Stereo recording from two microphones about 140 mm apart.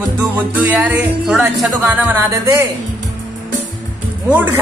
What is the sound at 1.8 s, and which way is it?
Speech, 15° right (ahead or behind).